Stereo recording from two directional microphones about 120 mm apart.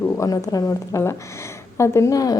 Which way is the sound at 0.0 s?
30° left (ahead or behind).